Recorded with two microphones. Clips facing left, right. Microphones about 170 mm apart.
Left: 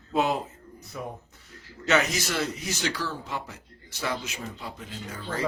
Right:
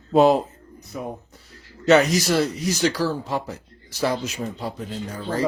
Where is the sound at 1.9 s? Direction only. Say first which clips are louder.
Right 9 dB; 35° right (ahead or behind).